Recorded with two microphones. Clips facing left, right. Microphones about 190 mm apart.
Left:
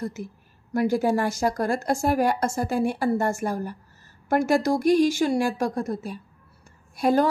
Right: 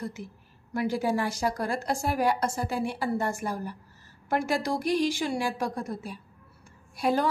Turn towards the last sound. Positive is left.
turn(degrees=45)  # may be behind; listen again after turning